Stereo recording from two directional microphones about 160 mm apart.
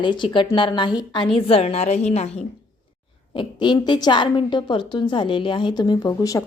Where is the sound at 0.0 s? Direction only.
30° left (ahead or behind).